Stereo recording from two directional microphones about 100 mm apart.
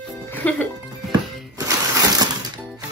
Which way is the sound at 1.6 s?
35° right (ahead or behind).